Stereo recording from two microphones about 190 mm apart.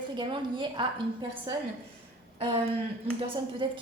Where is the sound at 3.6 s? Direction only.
25° right (ahead or behind).